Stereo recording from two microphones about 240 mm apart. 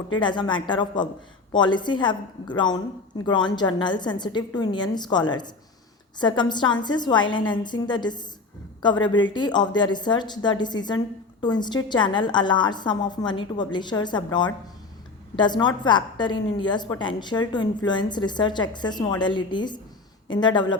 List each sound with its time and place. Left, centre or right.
0.1 s a woman's voice: centre